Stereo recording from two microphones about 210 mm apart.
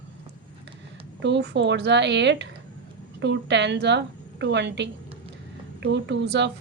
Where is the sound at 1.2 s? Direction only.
55° right (ahead or behind).